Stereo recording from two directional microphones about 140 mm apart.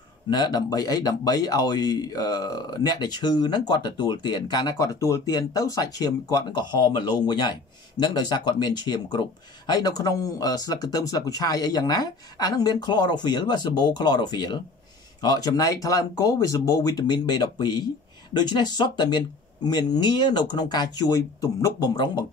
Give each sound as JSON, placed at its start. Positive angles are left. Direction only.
{"t": 0.3, "sound": "speech", "side_deg": 30}